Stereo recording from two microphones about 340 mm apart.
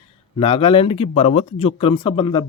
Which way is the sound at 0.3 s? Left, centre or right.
Centre.